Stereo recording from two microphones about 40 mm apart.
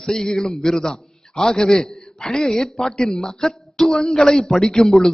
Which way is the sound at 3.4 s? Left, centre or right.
Centre.